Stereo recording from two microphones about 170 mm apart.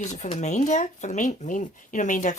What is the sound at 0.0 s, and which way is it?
Speech, 40° left (ahead or behind).